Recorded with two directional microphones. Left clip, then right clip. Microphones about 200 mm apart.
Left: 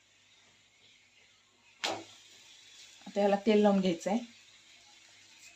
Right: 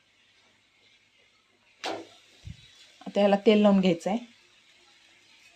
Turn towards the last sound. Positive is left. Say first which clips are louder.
# right 5 dB
turn(degrees=-35)  # may be behind; listen again after turning